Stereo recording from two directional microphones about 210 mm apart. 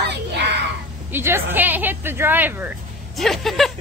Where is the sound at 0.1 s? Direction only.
55° right (ahead or behind).